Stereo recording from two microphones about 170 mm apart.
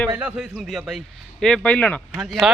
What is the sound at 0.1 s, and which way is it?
Speech, 10° right (ahead or behind).